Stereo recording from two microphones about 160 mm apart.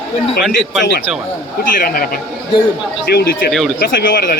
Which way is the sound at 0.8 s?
90° left.